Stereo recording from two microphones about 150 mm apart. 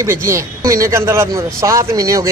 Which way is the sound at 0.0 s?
20° right (ahead or behind).